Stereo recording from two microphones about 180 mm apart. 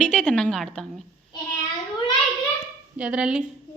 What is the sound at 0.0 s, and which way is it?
A woman's voice, 5° left (ahead or behind).